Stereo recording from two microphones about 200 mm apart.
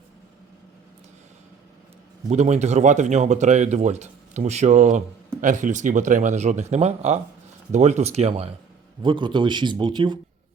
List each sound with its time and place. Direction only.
2.3 s speech: 35° right (ahead or behind)